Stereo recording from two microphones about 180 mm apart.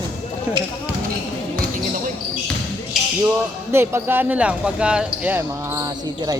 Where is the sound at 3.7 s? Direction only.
15° right (ahead or behind).